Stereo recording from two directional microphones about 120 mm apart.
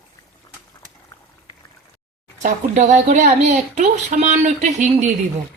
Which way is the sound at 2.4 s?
85° right.